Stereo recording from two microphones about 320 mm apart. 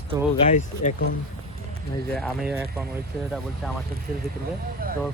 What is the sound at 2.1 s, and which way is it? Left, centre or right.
Speech, centre.